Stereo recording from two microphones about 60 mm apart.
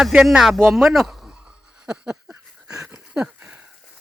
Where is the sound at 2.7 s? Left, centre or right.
Right.